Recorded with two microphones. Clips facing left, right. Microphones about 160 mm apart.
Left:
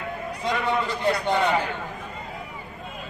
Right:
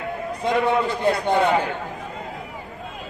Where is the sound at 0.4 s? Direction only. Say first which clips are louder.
Right 5 dB; 50° right (ahead or behind).